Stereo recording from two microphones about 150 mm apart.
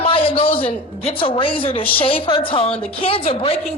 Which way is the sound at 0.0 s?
40° left (ahead or behind).